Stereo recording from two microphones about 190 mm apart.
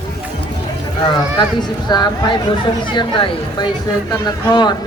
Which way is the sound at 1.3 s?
20° left (ahead or behind).